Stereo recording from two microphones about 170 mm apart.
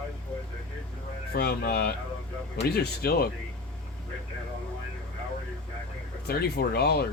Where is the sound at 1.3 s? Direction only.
70° left (ahead or behind).